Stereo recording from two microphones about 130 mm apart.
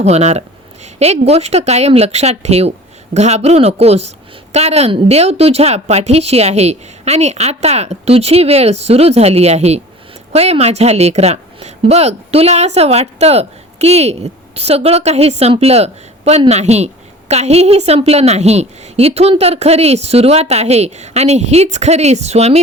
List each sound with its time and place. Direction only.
0.0 s a woman's voice: 55° right (ahead or behind)